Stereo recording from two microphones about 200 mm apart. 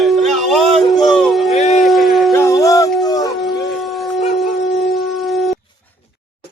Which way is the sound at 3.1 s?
20° left (ahead or behind).